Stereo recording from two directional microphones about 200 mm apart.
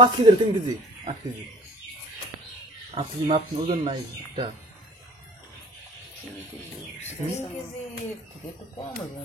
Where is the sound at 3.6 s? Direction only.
40° right (ahead or behind).